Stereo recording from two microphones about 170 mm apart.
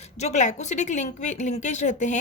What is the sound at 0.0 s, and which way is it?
A woman's voice, 40° left (ahead or behind).